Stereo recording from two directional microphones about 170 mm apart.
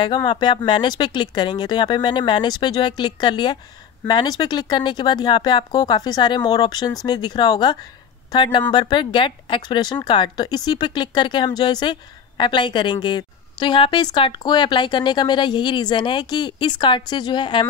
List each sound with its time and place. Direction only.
0.0 s speech: 25° left (ahead or behind)